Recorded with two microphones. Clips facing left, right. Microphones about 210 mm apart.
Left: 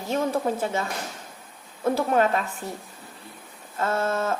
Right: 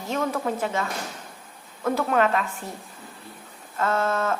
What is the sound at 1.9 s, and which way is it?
Speech, 30° left (ahead or behind).